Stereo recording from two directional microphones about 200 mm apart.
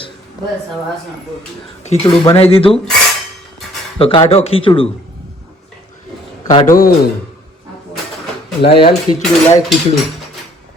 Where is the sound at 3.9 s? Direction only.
30° left (ahead or behind).